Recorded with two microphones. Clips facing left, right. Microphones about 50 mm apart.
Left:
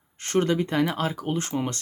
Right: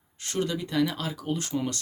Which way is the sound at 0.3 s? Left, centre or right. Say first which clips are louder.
Left 6 dB; left.